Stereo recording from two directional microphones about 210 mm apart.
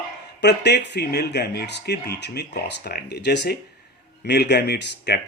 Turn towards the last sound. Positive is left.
turn(degrees=55)  # may be behind; listen again after turning